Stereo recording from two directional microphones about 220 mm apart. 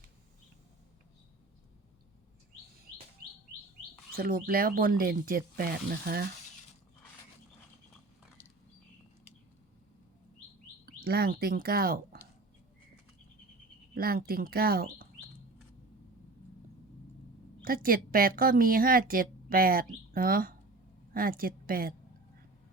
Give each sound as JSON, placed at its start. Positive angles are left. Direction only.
{"t": 4.1, "sound": "a woman's voice", "side_deg": -40}
{"t": 10.8, "sound": "speech", "side_deg": -45}
{"t": 13.9, "sound": "a woman's voice", "side_deg": -40}
{"t": 17.6, "sound": "a woman's voice", "side_deg": -40}